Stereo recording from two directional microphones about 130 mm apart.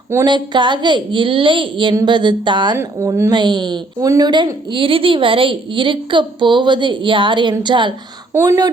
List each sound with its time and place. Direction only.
0.3 s a woman's voice: 35° right (ahead or behind)
2.7 s a woman's voice: 20° right (ahead or behind); by 7.9 s 35° right (ahead or behind)
8.3 s speech: 20° right (ahead or behind)